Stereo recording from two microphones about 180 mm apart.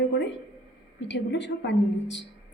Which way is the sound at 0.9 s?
75° left (ahead or behind).